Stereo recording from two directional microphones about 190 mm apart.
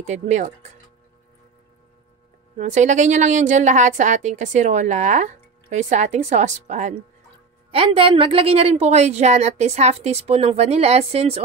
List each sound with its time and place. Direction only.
0.0 s a woman's voice: 40° right (ahead or behind)
2.5 s a woman's voice: 40° right (ahead or behind)